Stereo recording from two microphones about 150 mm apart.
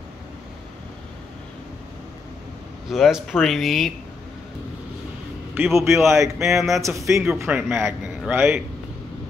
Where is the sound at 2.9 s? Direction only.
Centre (ahead or behind).